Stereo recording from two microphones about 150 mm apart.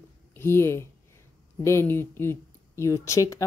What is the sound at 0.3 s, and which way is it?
Speech, 15° left (ahead or behind).